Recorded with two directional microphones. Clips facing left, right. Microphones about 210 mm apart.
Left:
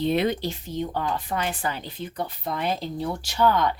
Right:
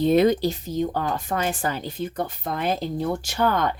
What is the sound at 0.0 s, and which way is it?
Speech, 40° right (ahead or behind).